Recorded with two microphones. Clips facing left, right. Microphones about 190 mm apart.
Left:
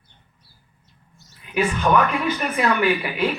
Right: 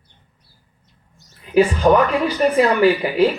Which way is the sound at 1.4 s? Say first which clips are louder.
Right 7 dB; 35° right (ahead or behind).